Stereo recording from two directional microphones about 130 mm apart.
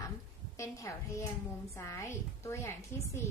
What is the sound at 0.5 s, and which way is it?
A child's voice, 25° left (ahead or behind).